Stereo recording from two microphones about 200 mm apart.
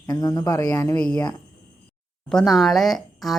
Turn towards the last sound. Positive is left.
turn(degrees=0)  # may be behind; listen again after turning